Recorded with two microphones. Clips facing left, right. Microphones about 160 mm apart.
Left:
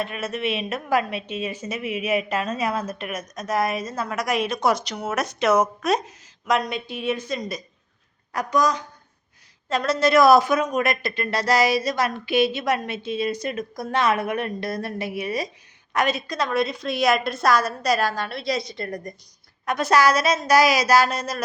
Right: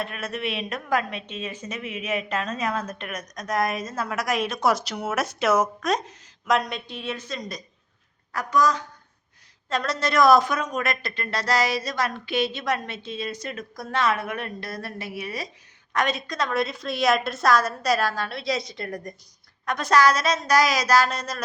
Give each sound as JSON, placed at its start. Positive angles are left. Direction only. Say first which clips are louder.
{"t": 0.0, "sound": "a woman's voice", "louder": "left 3 dB", "side_deg": 0}
{"t": 5.8, "sound": "speech", "louder": "left 3 dB", "side_deg": 5}
{"t": 9.6, "sound": "speech", "louder": "left 5 dB", "side_deg": 0}
{"t": 15.9, "sound": "a woman's voice", "louder": "left 2 dB", "side_deg": 5}